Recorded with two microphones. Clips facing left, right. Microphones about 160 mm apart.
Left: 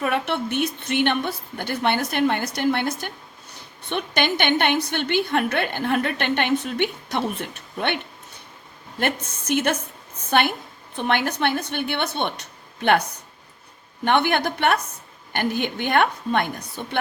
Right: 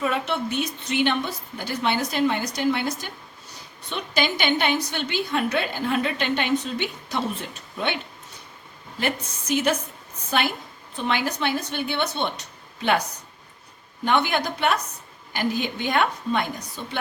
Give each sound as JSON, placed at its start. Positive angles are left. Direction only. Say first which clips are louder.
{"t": 0.0, "sound": "a woman's voice", "louder": "left 1 dB", "side_deg": 60}
{"t": 9.0, "sound": "a woman's voice", "louder": "left 2 dB", "side_deg": 55}
{"t": 10.9, "sound": "a woman's voice", "louder": "left 2 dB", "side_deg": 60}
{"t": 14.0, "sound": "a woman's voice", "louder": "left 2 dB", "side_deg": 60}